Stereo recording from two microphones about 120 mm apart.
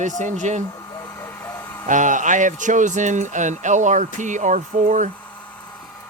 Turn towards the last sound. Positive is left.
turn(degrees=-90)